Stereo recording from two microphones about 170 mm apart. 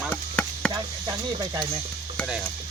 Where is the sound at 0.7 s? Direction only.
25° right (ahead or behind).